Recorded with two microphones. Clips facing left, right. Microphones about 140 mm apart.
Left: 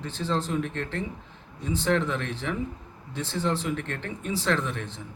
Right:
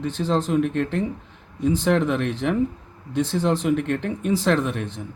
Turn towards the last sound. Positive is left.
turn(degrees=-60)  # may be behind; listen again after turning